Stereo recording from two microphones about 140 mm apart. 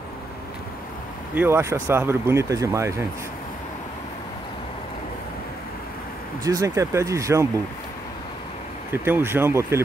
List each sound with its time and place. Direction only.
1.3 s speech: 15° right (ahead or behind)
6.4 s speech: 20° right (ahead or behind)
8.9 s speech: 15° right (ahead or behind)